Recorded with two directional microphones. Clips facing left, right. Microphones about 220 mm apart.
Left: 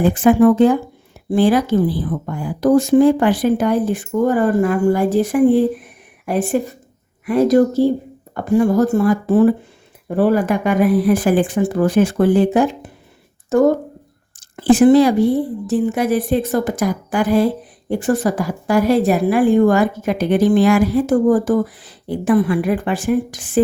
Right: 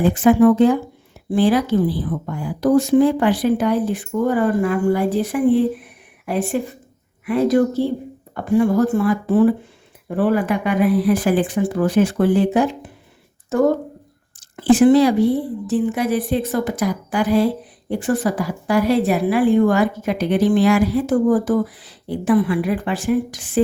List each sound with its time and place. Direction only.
0.1 s a woman's voice: 50° left (ahead or behind)
14.5 s a woman's voice: 45° left (ahead or behind)